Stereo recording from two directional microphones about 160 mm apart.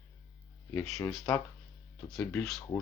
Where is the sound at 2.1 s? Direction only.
10° left (ahead or behind).